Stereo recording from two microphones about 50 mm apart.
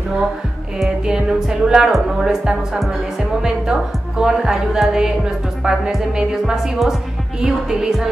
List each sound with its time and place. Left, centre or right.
1.0 s music: centre
4.2 s music: centre